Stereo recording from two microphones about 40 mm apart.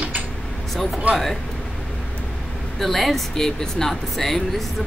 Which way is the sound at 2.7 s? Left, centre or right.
Centre.